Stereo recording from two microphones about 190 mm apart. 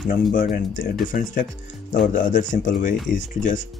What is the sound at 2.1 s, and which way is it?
Speech, 45° left (ahead or behind).